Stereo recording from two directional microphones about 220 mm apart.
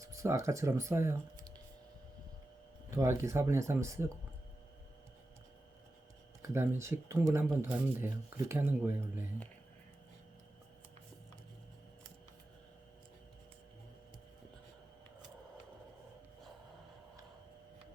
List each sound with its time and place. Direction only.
0.0 s speech: 15° right (ahead or behind)
2.9 s speech: 10° right (ahead or behind)
6.4 s speech: 10° right (ahead or behind)